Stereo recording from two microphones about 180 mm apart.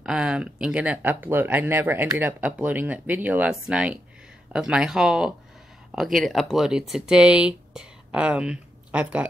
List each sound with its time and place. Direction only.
0.0 s speech: 5° right (ahead or behind)